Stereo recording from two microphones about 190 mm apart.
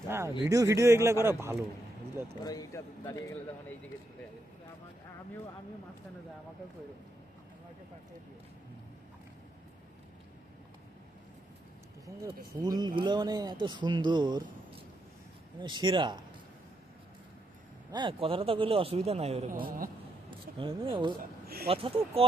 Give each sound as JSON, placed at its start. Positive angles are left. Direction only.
{"t": 0.1, "sound": "speech", "side_deg": -15}
{"t": 2.4, "sound": "speech", "side_deg": 20}
{"t": 12.0, "sound": "speech", "side_deg": -20}
{"t": 17.9, "sound": "speech", "side_deg": -25}
{"t": 19.6, "sound": "a man's voice", "side_deg": -50}
{"t": 20.8, "sound": "speech", "side_deg": -25}
{"t": 21.4, "sound": "speech", "side_deg": -55}
{"t": 21.7, "sound": "speech", "side_deg": -30}